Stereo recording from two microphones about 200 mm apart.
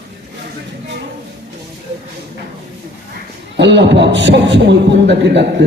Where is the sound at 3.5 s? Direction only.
60° right (ahead or behind).